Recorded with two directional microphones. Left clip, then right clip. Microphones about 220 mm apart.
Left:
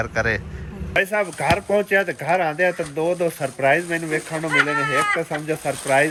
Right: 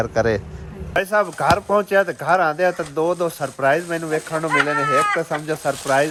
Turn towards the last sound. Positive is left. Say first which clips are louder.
# right 2 dB
turn(degrees=-15)  # may be behind; listen again after turning